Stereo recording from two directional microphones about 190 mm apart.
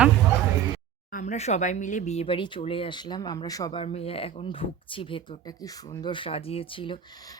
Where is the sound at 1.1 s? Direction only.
40° left (ahead or behind); by 3.8 s 20° left (ahead or behind).